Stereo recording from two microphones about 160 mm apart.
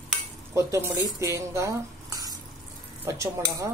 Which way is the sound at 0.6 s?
15° right (ahead or behind).